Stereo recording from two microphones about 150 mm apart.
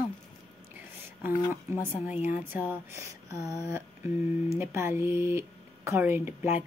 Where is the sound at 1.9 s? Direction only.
10° right (ahead or behind).